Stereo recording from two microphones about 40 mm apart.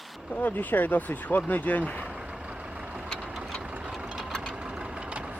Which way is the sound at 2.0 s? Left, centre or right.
Right.